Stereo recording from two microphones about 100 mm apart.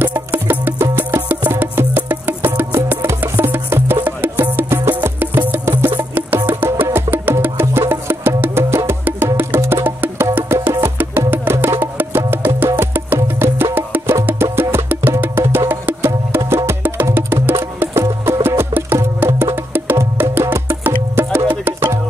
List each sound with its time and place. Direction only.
0.0 s music: 20° right (ahead or behind)